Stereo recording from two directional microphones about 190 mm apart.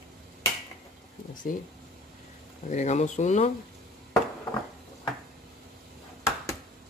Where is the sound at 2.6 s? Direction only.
40° left (ahead or behind).